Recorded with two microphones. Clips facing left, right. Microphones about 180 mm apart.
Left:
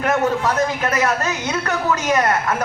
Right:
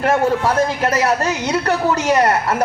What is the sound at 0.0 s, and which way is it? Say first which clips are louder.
A man's voice: right 2 dB; 30° right (ahead or behind).